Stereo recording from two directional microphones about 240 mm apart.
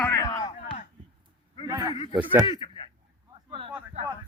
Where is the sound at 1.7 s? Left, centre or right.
Centre.